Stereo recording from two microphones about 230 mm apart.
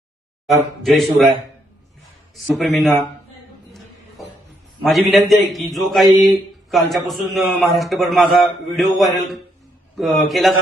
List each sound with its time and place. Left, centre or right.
0.4 s a man's voice: centre
2.3 s a man's voice: centre
4.8 s a man's voice: centre
6.1 s speech: centre
6.7 s a man's voice: centre